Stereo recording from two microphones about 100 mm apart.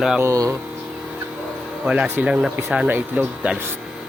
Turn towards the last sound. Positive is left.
turn(degrees=-20)  # may be behind; listen again after turning